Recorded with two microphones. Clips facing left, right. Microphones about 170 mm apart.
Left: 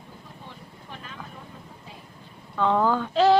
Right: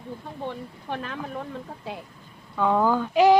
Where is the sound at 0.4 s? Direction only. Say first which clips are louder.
Right 14 dB; 65° right (ahead or behind).